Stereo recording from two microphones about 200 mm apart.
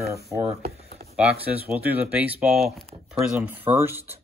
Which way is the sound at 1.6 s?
10° right (ahead or behind).